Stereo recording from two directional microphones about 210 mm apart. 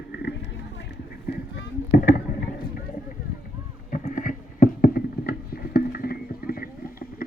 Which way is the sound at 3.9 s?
40° left (ahead or behind).